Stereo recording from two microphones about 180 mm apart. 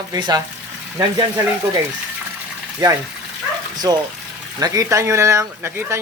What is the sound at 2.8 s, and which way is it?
Speech, 20° right (ahead or behind).